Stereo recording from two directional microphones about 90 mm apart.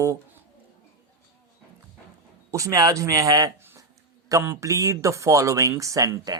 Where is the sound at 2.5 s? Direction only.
40° right (ahead or behind).